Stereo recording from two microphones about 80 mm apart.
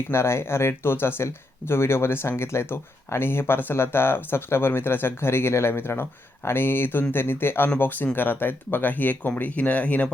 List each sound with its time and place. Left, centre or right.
0.1 s speech: left